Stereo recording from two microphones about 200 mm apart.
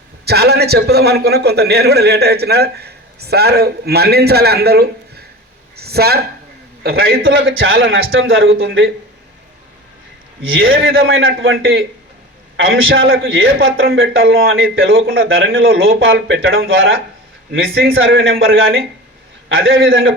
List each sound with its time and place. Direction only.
0.3 s a man's voice: 55° right (ahead or behind)
7.2 s a man's voice: 75° right (ahead or behind)
10.4 s a man's voice: 80° right
14.2 s a man's voice: 50° right (ahead or behind)
14.4 s a man's voice: 80° right
18.0 s a man's voice: 80° right